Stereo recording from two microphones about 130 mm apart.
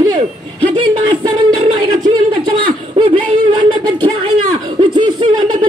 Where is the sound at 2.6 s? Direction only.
40° right (ahead or behind).